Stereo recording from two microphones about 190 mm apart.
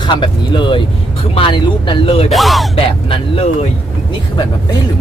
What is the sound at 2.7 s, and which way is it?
Speech, 30° left (ahead or behind).